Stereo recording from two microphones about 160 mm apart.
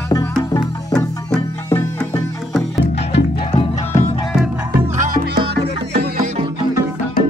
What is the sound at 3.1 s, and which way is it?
Music, 90° left.